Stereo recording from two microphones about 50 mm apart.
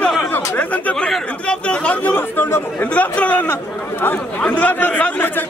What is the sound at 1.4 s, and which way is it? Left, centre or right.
Speech, left.